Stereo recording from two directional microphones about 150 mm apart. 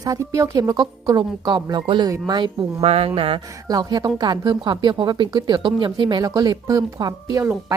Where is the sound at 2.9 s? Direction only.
40° right (ahead or behind).